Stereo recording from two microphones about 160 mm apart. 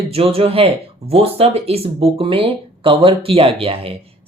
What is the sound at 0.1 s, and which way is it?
Speech, 35° right (ahead or behind).